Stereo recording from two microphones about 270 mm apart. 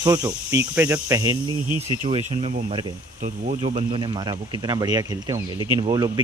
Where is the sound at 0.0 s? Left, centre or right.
Centre.